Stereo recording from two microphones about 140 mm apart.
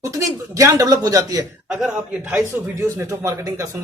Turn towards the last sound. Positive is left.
turn(degrees=-25)  # may be behind; listen again after turning